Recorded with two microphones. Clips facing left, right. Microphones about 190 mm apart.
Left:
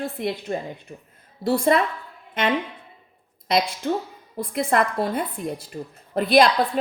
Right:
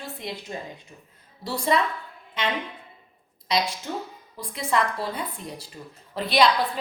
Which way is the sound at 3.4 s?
55° left (ahead or behind).